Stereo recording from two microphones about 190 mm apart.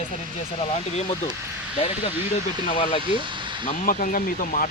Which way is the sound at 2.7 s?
35° left (ahead or behind).